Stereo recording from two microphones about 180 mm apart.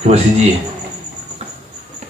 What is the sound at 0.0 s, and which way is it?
Speech, 35° right (ahead or behind).